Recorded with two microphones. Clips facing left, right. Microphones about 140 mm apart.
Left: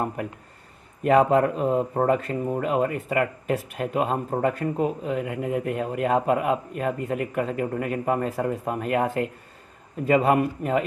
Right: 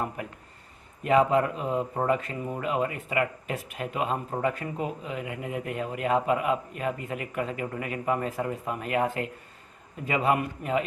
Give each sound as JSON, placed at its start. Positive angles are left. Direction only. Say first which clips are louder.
{"t": 1.0, "sound": "speech", "louder": "left 4 dB", "side_deg": 45}